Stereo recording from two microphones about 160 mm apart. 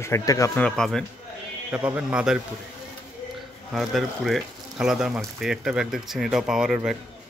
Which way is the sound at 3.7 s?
Centre (ahead or behind).